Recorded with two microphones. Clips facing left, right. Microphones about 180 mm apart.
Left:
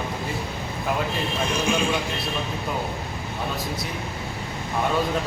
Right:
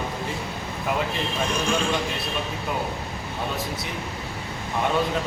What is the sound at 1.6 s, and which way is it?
Speech, 5° left (ahead or behind).